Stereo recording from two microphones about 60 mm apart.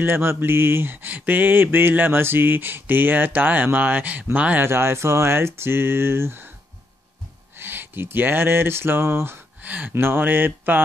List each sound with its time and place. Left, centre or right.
0.0 s mantra: right
4.6 s speech: right
7.5 s speech: right
9.6 s mantra: right